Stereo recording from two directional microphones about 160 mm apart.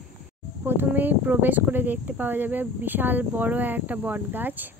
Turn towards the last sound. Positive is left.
turn(degrees=-10)  # may be behind; listen again after turning